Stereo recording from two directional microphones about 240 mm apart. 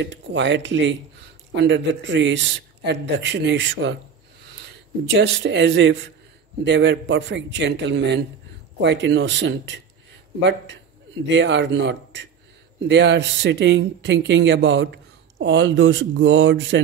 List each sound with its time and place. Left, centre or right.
0.0 s speech: right
11.2 s speech: right